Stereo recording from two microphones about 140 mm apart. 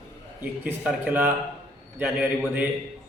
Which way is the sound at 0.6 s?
10° right (ahead or behind).